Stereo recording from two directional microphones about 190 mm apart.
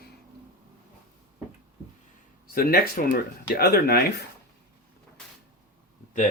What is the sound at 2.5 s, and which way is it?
Speech, 50° left (ahead or behind).